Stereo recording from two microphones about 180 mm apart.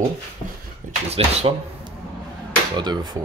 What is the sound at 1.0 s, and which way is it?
Speech, 35° right (ahead or behind).